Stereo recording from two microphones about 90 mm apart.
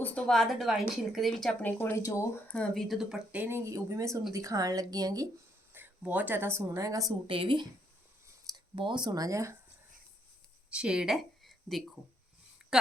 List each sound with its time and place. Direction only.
0.0 s a woman's voice: 15° left (ahead or behind)
0.3 s speech: 5° left (ahead or behind)
1.6 s speech: 20° left (ahead or behind)
2.0 s speech: 40° left (ahead or behind)
2.5 s speech: 10° left (ahead or behind)
2.8 s speech: centre (ahead or behind)
3.3 s speech: 20° right (ahead or behind)
3.6 s speech: 35° right (ahead or behind)
5.7 s speech: 20° right (ahead or behind)
6.7 s speech: 35° right (ahead or behind)
7.3 s speech: 70° right (ahead or behind)
8.7 s speech: 65° right (ahead or behind); by 9.6 s 35° right (ahead or behind)
10.7 s speech: 10° right (ahead or behind)